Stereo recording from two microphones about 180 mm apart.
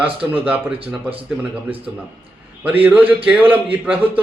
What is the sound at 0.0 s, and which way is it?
Speech, 10° right (ahead or behind).